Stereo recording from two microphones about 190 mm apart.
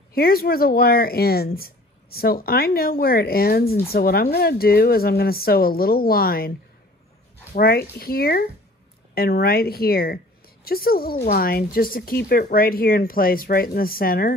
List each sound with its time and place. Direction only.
0.1 s a woman's voice: 50° left (ahead or behind)
7.5 s a woman's voice: 55° left (ahead or behind)